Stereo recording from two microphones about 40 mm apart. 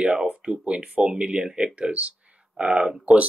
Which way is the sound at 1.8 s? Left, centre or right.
Right.